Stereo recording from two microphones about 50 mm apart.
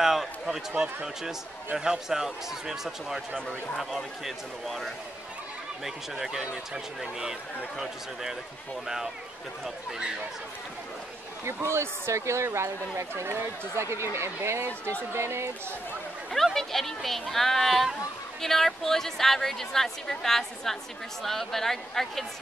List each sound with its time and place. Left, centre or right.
0.0 s speech: centre
4.2 s speech: centre
6.4 s speech: centre
11.4 s speech: right
16.5 s a woman's voice: centre